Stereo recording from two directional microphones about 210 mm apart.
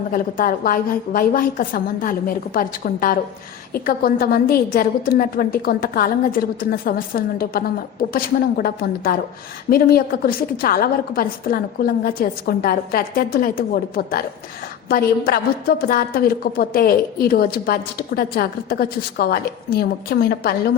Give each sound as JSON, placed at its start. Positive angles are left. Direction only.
{"t": 0.1, "sound": "a woman's voice", "side_deg": 40}